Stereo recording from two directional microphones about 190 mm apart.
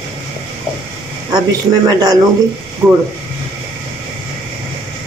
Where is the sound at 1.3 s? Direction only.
20° right (ahead or behind).